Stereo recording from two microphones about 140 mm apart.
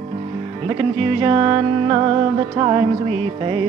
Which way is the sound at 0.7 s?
30° right (ahead or behind).